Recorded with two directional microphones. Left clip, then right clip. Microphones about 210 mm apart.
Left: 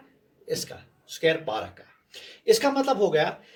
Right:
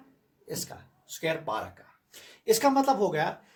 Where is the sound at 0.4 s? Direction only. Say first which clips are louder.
Left 7 dB; 30° right (ahead or behind).